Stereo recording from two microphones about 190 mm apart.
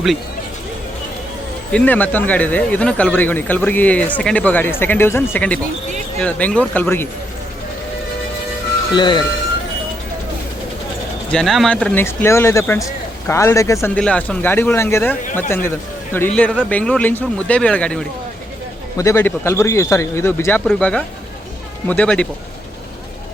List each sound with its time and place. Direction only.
1.7 s speech: 10° left (ahead or behind)
9.0 s speech: 25° left (ahead or behind)
11.3 s speech: centre (ahead or behind)